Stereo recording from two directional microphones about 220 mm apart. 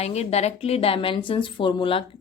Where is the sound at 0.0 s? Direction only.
30° left (ahead or behind).